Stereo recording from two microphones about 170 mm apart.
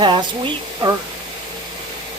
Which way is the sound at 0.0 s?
30° right (ahead or behind).